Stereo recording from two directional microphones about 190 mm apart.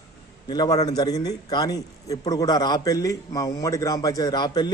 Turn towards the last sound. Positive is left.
turn(degrees=20)  # may be behind; listen again after turning